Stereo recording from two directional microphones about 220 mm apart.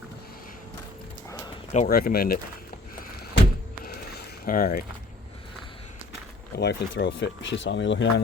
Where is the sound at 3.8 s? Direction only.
40° left (ahead or behind).